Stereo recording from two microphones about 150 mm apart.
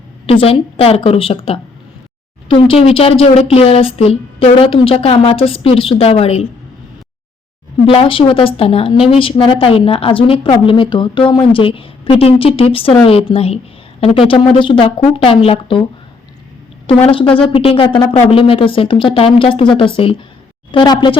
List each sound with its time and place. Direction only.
0.3 s a woman's voice: 40° left (ahead or behind)
7.9 s a woman's voice: 35° left (ahead or behind)
17.1 s a woman's voice: 35° left (ahead or behind)